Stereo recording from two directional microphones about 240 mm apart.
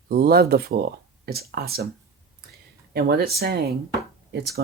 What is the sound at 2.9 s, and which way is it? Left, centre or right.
Speech, right.